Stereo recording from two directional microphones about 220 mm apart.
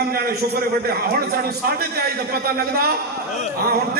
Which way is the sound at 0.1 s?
45° right (ahead or behind).